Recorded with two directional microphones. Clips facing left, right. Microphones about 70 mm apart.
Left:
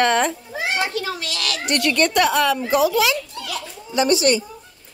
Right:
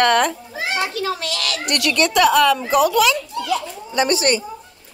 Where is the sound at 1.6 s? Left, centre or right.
Right.